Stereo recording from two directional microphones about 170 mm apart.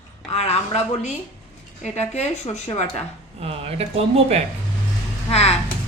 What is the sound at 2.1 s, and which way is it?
Speech, 40° left (ahead or behind).